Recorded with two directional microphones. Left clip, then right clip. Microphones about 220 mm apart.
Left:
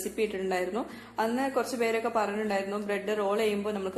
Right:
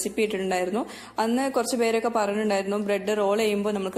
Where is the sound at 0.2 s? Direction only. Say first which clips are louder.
Right 4 dB; 35° right (ahead or behind).